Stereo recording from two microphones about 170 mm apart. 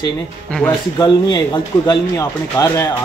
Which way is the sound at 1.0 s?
25° left (ahead or behind).